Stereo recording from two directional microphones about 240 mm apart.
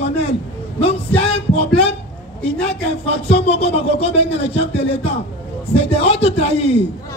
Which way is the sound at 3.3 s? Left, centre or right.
Left.